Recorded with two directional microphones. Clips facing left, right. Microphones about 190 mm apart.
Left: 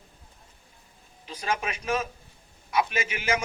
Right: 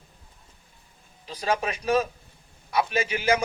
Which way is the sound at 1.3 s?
35° right (ahead or behind).